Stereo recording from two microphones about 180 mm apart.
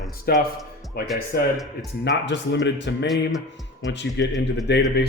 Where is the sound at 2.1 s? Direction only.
75° left (ahead or behind).